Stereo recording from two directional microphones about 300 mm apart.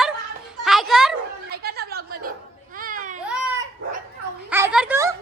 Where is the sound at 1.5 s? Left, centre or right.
Right.